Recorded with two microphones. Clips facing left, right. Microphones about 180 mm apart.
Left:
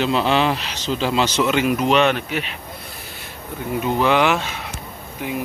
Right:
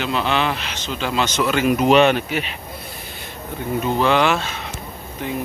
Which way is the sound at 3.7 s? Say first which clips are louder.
Even; 10° left (ahead or behind).